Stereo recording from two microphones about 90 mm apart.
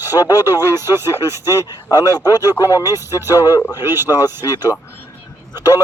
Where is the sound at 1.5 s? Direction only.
45° left (ahead or behind).